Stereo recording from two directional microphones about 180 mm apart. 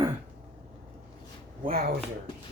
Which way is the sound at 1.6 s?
60° right (ahead or behind).